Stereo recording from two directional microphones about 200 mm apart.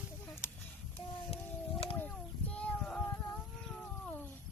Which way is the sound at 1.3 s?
30° left (ahead or behind).